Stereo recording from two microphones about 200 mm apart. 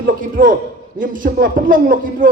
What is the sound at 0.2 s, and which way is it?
A man's voice, 40° right (ahead or behind).